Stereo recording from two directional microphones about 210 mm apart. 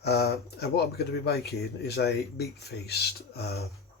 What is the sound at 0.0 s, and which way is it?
Speech, 50° left (ahead or behind).